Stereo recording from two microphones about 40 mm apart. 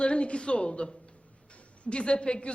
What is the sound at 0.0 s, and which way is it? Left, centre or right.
A man's voice, left.